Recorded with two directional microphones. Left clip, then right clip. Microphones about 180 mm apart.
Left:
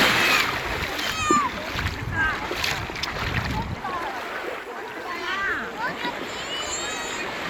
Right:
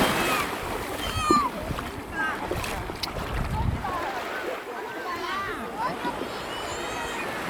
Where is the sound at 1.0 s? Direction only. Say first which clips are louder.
Left 1 dB; centre (ahead or behind).